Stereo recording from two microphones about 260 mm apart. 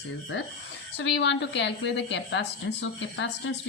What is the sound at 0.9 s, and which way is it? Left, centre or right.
A woman's voice, left.